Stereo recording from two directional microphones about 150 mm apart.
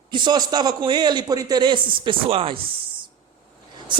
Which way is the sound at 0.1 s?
30° right (ahead or behind).